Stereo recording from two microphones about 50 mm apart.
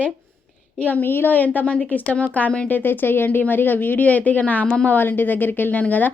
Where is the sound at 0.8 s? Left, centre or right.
Left.